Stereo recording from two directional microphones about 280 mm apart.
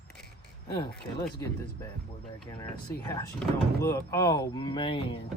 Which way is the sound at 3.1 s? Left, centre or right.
Centre.